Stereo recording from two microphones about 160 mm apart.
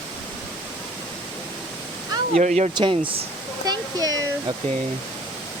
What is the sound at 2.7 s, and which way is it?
Speech, 30° right (ahead or behind).